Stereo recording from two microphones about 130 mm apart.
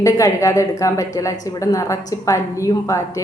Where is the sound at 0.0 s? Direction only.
25° left (ahead or behind).